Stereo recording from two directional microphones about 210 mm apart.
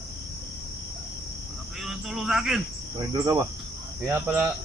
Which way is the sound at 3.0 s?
15° right (ahead or behind).